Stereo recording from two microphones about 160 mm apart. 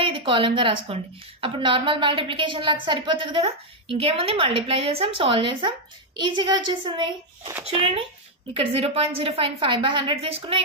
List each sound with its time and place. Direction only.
0.0 s a woman's voice: 35° right (ahead or behind)